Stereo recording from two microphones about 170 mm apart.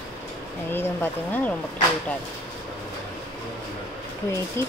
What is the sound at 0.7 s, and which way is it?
Speech, 15° left (ahead or behind).